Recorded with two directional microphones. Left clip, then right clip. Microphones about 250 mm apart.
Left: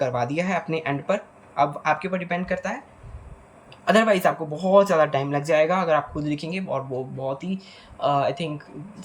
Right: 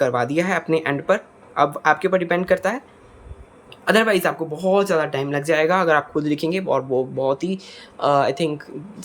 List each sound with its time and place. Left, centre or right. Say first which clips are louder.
0.0 s speech: right 5 dB; centre
3.8 s speech: right 1 dB; centre